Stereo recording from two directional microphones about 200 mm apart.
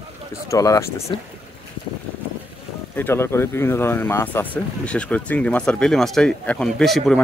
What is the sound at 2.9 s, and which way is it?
Speech, 10° left (ahead or behind).